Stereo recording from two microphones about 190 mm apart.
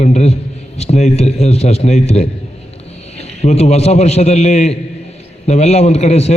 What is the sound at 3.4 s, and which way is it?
A man's voice, 35° left (ahead or behind).